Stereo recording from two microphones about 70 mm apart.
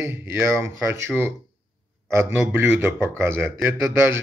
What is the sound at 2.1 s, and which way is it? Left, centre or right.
A man's voice, right.